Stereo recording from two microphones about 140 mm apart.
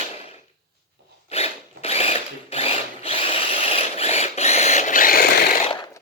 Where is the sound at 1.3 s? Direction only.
45° left (ahead or behind); by 5.7 s 85° left.